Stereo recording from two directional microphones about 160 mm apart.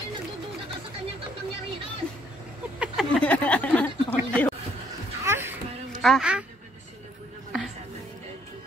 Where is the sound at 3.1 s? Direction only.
10° left (ahead or behind).